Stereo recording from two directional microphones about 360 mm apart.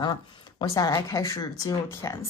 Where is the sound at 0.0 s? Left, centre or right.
Centre.